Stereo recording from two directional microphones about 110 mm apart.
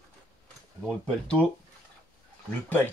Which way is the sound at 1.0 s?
10° left (ahead or behind).